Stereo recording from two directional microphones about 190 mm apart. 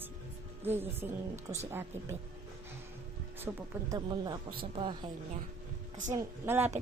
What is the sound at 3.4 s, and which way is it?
Speech, 15° right (ahead or behind).